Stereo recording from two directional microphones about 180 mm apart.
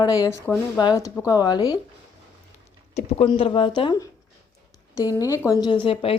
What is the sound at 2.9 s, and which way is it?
Speech, 30° left (ahead or behind).